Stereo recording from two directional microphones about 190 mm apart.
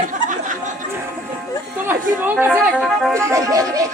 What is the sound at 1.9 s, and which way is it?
Speech, 10° right (ahead or behind).